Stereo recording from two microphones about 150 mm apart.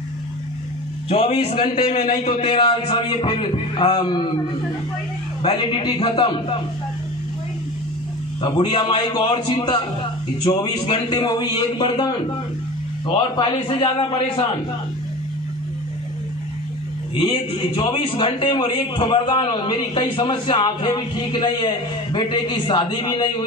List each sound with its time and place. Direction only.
1.0 s a man's voice: 40° left (ahead or behind)
5.4 s a man's voice: 35° left (ahead or behind)
8.4 s a man's voice: 35° left (ahead or behind)
17.2 s a man's voice: 30° left (ahead or behind)